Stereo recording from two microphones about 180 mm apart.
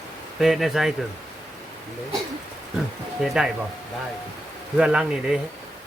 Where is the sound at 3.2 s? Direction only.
Centre (ahead or behind).